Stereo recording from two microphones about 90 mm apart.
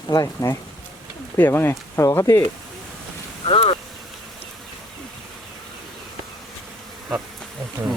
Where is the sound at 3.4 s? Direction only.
90° left.